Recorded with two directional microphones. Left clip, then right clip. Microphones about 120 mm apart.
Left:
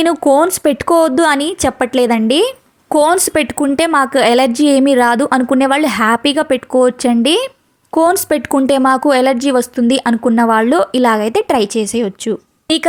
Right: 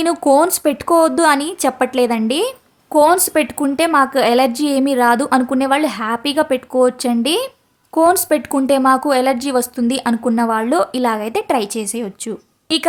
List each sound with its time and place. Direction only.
0.0 s speech: 30° left (ahead or behind)